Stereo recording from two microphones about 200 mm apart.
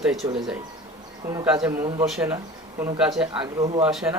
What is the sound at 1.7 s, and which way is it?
Speech, 20° right (ahead or behind).